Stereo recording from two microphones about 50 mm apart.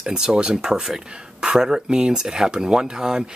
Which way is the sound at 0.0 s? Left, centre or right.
Centre.